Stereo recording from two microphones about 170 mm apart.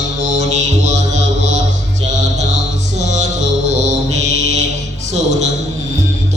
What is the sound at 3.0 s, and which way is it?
Music, 45° right (ahead or behind).